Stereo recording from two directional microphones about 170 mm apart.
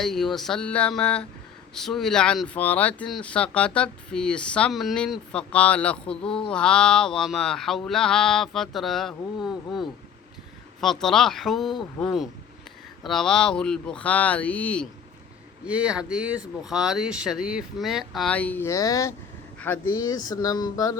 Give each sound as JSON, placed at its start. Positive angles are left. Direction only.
{"t": 0.0, "sound": "speech", "side_deg": 0}
{"t": 15.6, "sound": "speech", "side_deg": -5}
{"t": 19.5, "sound": "a sound", "side_deg": 10}
{"t": 19.9, "sound": "speech", "side_deg": 20}